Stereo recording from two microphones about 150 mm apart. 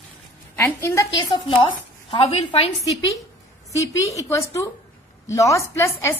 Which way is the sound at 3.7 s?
20° left (ahead or behind).